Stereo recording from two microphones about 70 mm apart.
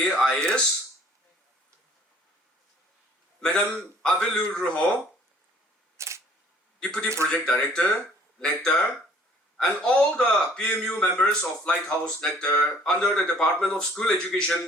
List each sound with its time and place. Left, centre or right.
0.0 s a sound: centre
3.4 s speech: centre
6.0 s camera: right
6.7 s a man's voice: centre